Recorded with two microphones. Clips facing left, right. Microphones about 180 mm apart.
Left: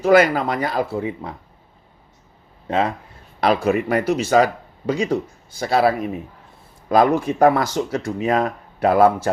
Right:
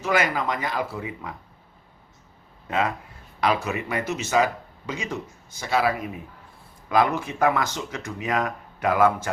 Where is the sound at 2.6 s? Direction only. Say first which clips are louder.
Left 4 dB; 30° left (ahead or behind).